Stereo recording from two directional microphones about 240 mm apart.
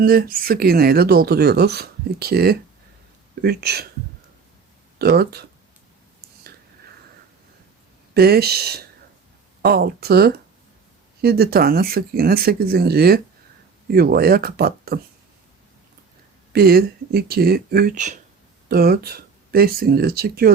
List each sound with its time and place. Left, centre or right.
0.0 s speech: right
4.9 s speech: right
8.1 s speech: right
16.5 s speech: right